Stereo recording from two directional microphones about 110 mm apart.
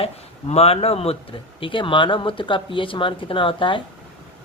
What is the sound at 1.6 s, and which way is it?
Speech, 50° left (ahead or behind).